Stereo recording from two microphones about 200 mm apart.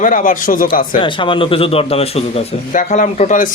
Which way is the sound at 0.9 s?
25° left (ahead or behind).